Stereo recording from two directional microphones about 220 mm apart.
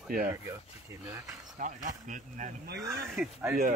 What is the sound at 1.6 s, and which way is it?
Speech, 35° right (ahead or behind).